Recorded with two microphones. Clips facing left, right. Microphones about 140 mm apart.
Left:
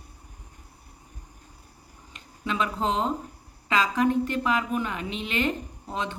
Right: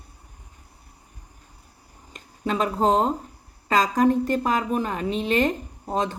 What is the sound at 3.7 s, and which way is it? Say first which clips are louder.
Speech: right 4 dB; 40° right (ahead or behind).